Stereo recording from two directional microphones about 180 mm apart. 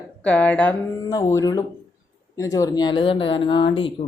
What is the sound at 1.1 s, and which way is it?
Speech, 20° left (ahead or behind).